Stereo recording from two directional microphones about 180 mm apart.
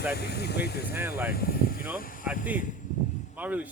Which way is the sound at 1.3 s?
55° left (ahead or behind).